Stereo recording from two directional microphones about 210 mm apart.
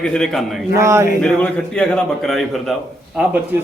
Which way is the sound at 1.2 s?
5° left (ahead or behind).